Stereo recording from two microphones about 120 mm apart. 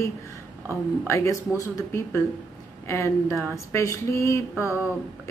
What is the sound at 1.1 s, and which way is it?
A woman's voice, 25° left (ahead or behind).